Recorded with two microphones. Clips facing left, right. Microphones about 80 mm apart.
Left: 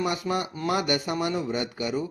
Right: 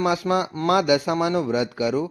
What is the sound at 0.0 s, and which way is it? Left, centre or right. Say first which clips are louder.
Speech: right 6 dB; right.